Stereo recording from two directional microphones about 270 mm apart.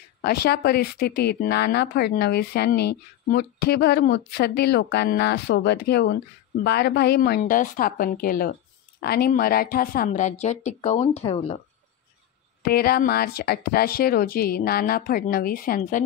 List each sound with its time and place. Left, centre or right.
0.2 s a woman's voice: left
12.6 s speech: left